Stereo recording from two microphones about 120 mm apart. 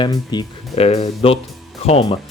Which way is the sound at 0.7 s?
60° left (ahead or behind).